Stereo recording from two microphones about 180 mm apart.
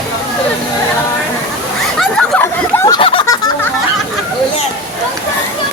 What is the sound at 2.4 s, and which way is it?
Snicker, 15° left (ahead or behind).